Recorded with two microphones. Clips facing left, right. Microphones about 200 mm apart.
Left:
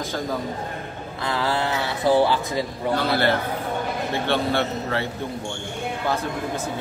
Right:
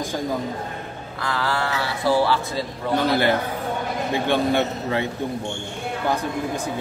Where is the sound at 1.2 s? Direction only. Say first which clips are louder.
Left 1 dB; 20° left (ahead or behind).